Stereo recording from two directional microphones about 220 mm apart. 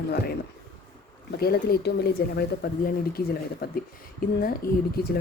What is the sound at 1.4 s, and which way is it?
Speech, 45° left (ahead or behind).